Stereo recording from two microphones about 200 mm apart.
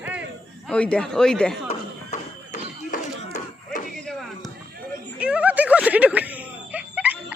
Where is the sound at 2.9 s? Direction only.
45° left (ahead or behind).